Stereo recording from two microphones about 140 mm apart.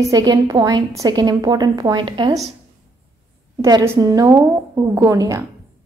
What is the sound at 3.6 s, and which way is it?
A woman's voice, 25° right (ahead or behind).